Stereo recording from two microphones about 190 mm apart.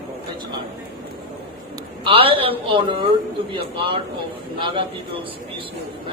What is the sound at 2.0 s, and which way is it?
A woman's voice, 30° right (ahead or behind).